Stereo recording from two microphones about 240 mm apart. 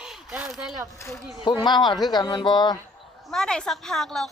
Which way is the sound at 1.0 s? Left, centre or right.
Centre.